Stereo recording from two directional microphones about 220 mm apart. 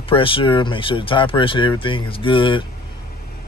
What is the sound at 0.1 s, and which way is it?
A man's voice, 25° left (ahead or behind).